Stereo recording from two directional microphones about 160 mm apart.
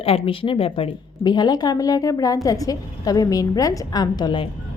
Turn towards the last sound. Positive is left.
turn(degrees=30)  # may be behind; listen again after turning